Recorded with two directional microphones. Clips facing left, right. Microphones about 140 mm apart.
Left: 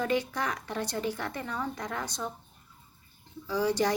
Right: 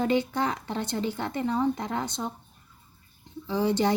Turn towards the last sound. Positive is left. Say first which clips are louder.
# right 2 dB
turn(degrees=-25)  # may be behind; listen again after turning